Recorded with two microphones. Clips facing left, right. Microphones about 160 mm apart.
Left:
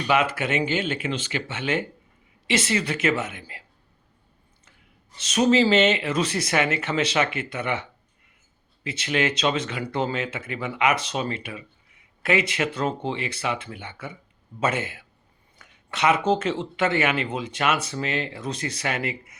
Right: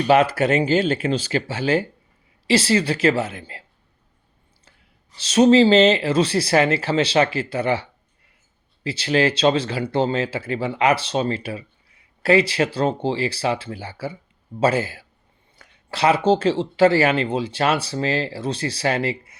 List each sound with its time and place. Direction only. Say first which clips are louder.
0.1 s speech: right 6 dB; 35° right (ahead or behind)
5.1 s speech: right 6 dB; 30° right (ahead or behind)